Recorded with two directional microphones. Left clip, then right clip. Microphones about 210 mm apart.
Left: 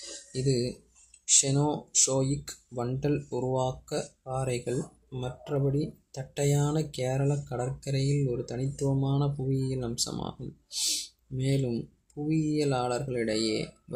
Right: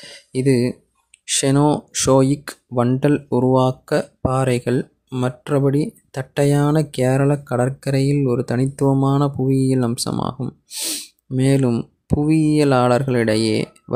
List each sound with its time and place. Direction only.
0.3 s speech: 50° right (ahead or behind)